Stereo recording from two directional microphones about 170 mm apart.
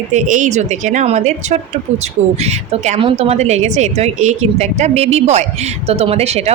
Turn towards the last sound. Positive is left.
turn(degrees=-40)  # may be behind; listen again after turning